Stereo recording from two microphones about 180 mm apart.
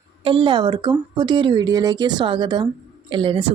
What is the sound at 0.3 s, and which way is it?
Speech, 30° right (ahead or behind).